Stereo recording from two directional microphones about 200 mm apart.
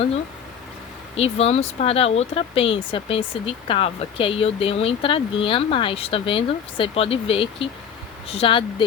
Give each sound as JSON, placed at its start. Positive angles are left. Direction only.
{"t": 1.1, "sound": "speech", "side_deg": 30}